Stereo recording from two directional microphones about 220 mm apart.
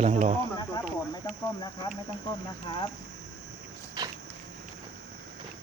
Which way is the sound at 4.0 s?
15° right (ahead or behind).